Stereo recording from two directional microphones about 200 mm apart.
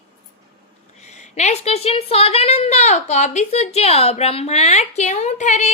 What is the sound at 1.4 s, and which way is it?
A woman's voice, 35° left (ahead or behind).